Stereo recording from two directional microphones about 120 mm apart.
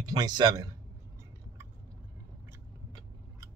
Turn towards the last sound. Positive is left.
turn(degrees=-25)  # may be behind; listen again after turning